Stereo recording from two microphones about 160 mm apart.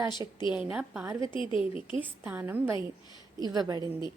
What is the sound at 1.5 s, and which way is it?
Speech, 35° left (ahead or behind).